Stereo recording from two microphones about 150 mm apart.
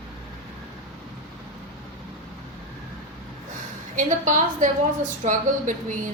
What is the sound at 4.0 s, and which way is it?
A woman's voice, 55° right (ahead or behind).